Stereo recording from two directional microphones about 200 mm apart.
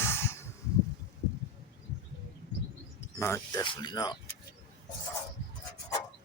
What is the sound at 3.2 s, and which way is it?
Speech, 15° left (ahead or behind).